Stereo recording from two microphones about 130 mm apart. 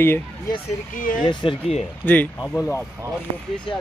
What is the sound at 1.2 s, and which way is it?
Speech, 40° left (ahead or behind).